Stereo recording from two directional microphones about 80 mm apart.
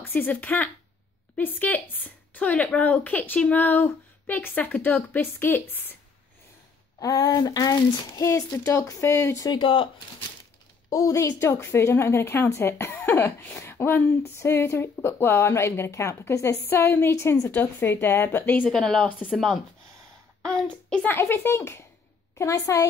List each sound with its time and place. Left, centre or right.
0.0 s a woman's voice: left
7.0 s a woman's voice: left
9.5 s speech: left
10.9 s a woman's voice: left
17.5 s a woman's voice: left
18.7 s speech: centre
21.1 s a woman's voice: left